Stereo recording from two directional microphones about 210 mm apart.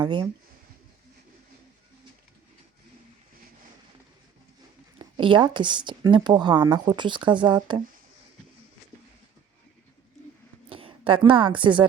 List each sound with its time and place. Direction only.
0.0 s speech: 20° right (ahead or behind)
4.9 s speech: 25° right (ahead or behind)
10.7 s a woman's voice: 25° right (ahead or behind)